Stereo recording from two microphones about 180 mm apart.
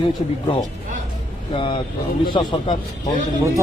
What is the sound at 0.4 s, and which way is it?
Speech, 25° left (ahead or behind).